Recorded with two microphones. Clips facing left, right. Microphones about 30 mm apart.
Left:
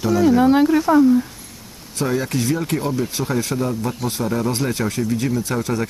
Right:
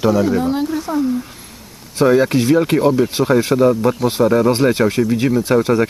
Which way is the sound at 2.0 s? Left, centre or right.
Right.